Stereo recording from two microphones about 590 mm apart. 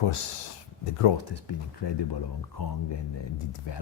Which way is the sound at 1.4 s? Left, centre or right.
Left.